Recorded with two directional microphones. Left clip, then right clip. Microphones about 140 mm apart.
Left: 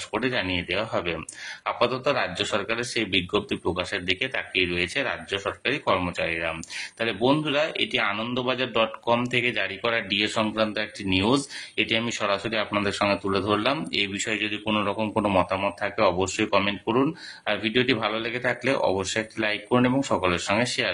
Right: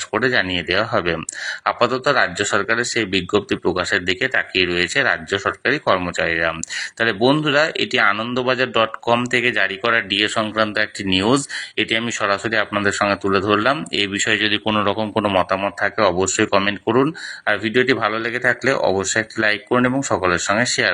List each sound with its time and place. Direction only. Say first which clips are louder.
0.1 s speech: right 8 dB; 30° right (ahead or behind)